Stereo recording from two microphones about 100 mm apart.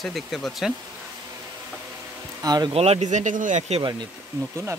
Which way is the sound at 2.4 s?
40° right (ahead or behind).